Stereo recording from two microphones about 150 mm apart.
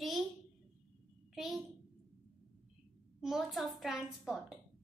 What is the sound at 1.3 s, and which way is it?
Speech, 5° right (ahead or behind).